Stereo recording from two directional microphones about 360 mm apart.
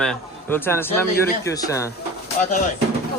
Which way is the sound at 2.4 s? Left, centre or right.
Left.